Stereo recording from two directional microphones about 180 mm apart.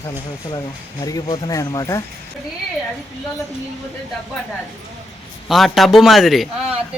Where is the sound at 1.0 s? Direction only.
20° left (ahead or behind).